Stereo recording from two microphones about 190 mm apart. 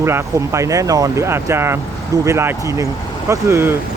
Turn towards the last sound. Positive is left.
turn(degrees=-15)  # may be behind; listen again after turning